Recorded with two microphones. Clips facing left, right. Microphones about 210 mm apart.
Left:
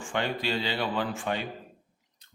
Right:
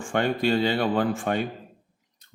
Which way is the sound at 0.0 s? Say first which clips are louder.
Right 6 dB; 50° right (ahead or behind).